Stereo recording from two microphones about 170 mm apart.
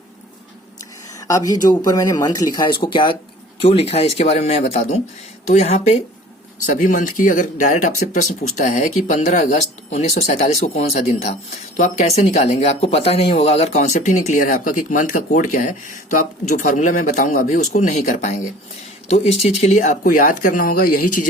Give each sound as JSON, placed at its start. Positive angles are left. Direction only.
{"t": 1.3, "sound": "speech", "side_deg": 20}